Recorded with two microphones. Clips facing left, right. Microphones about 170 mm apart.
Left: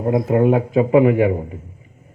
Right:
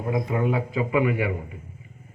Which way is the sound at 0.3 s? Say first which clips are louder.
Left 9 dB; 60° left (ahead or behind).